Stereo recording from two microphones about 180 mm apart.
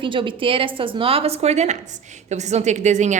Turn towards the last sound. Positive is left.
turn(degrees=-40)  # may be behind; listen again after turning